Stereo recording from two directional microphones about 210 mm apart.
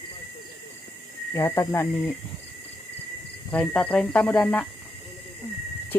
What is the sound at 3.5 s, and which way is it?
Speech, 5° left (ahead or behind).